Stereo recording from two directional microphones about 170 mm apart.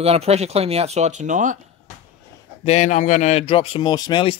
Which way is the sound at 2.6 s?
45° left (ahead or behind).